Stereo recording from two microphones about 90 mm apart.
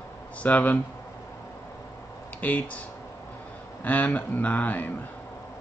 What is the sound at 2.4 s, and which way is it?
Speech, 15° left (ahead or behind).